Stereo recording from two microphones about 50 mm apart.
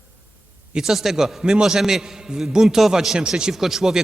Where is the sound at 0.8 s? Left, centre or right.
Centre.